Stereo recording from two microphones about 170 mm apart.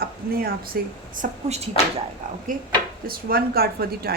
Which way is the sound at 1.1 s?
45° right (ahead or behind).